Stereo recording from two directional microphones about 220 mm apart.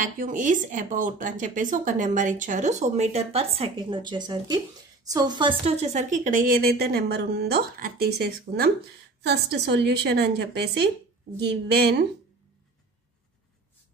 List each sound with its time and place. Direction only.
0.0 s speech: 35° right (ahead or behind)